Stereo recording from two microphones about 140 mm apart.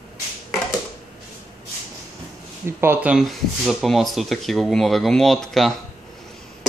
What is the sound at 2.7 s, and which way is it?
Speech, 15° right (ahead or behind).